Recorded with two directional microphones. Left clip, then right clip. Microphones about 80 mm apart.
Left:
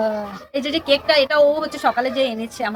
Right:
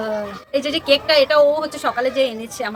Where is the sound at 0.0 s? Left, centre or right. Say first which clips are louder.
Left 2 dB; right.